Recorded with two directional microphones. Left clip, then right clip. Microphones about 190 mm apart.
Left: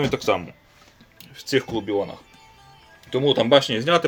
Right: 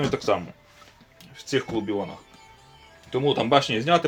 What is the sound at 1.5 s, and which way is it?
Speech, 50° left (ahead or behind).